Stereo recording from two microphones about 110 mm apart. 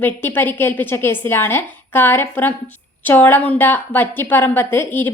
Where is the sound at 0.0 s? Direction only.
20° left (ahead or behind).